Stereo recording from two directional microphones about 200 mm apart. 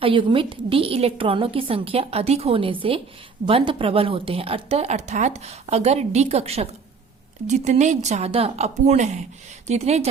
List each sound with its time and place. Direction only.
0.0 s a woman's voice: 25° right (ahead or behind)